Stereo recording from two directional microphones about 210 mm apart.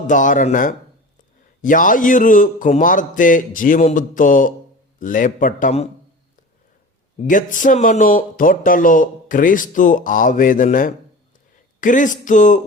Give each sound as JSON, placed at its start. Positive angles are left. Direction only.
{"t": 0.1, "sound": "speech", "side_deg": 40}
{"t": 7.2, "sound": "speech", "side_deg": 40}